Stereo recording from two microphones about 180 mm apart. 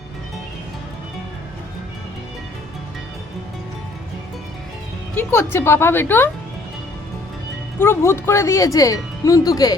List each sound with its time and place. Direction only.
5.1 s speech: 15° left (ahead or behind)
7.8 s speech: 15° left (ahead or behind)